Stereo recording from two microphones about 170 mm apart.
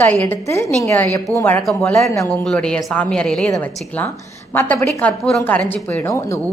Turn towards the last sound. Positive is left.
turn(degrees=15)  # may be behind; listen again after turning